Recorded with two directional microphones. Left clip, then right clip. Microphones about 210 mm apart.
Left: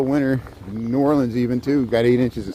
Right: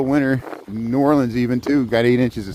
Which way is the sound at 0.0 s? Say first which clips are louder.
Right 2 dB; 40° right (ahead or behind).